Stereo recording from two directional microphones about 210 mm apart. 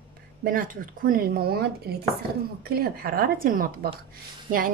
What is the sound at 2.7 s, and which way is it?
Speech, 45° right (ahead or behind).